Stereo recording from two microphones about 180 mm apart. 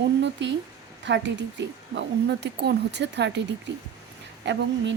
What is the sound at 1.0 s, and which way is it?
A woman's voice, 80° right.